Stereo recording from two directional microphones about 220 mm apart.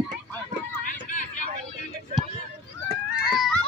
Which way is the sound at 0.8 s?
35° left (ahead or behind).